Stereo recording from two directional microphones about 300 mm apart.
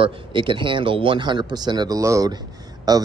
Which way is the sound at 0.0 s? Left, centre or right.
Centre.